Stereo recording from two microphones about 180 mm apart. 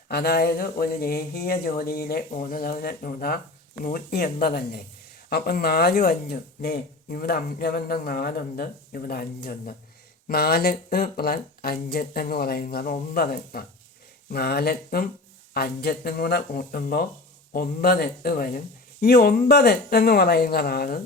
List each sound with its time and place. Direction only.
0.1 s speech: 60° left (ahead or behind)